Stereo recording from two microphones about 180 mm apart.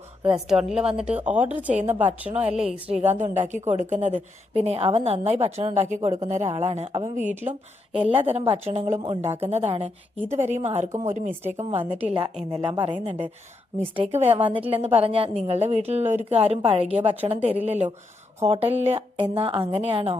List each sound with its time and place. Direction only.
0.3 s a woman's voice: 5° right (ahead or behind)
2.9 s a woman's voice: 40° right (ahead or behind)
7.9 s a woman's voice: 30° right (ahead or behind)